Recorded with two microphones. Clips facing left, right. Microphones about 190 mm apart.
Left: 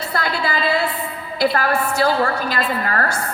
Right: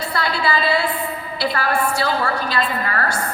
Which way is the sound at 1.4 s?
45° left (ahead or behind).